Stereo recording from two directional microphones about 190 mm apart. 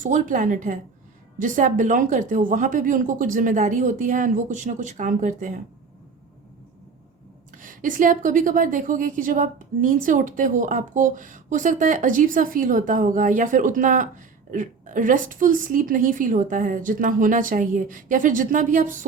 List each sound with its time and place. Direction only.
0.0 s a woman's voice: 45° right (ahead or behind)
7.5 s a woman's voice: 45° right (ahead or behind)